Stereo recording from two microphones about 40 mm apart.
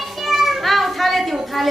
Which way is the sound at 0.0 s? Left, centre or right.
Centre.